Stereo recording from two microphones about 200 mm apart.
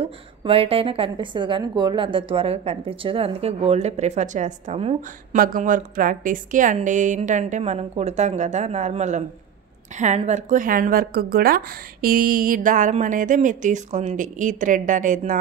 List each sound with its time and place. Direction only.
0.0 s a woman's voice: 25° right (ahead or behind)
5.4 s speech: 45° right (ahead or behind)